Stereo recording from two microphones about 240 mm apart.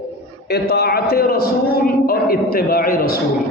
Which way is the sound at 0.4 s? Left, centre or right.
Left.